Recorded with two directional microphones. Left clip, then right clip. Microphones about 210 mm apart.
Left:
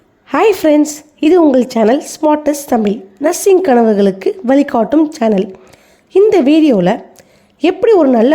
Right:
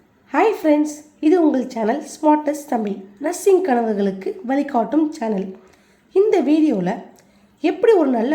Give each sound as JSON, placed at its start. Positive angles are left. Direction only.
{"t": 0.3, "sound": "a woman's voice", "side_deg": 50}